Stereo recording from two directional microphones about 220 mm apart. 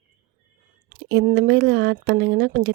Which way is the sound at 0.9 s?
45° right (ahead or behind).